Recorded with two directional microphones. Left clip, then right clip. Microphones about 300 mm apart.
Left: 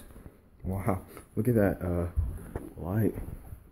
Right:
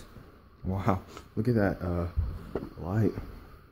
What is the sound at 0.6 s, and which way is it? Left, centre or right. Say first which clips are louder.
Rub: right 2 dB; centre.